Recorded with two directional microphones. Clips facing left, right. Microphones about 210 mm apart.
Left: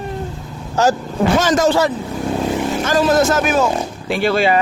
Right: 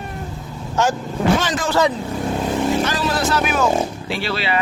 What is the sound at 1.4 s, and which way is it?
Speech, 45° left (ahead or behind).